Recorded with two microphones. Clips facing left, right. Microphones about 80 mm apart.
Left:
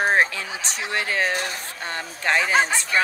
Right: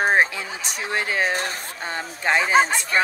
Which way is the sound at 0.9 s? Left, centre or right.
Centre.